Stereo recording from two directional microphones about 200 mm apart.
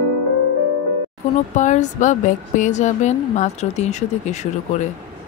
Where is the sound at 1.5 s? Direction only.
35° left (ahead or behind).